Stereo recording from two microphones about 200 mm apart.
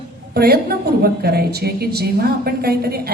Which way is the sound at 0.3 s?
50° right (ahead or behind).